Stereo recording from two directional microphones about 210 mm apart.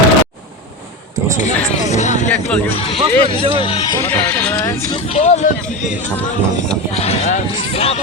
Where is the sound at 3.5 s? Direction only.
25° left (ahead or behind).